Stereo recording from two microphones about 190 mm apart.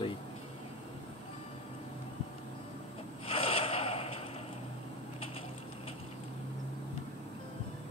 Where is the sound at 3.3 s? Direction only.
30° left (ahead or behind).